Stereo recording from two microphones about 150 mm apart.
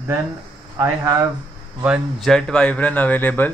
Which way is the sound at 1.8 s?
5° right (ahead or behind).